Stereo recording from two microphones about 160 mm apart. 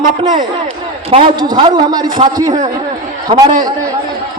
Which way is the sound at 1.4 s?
30° right (ahead or behind).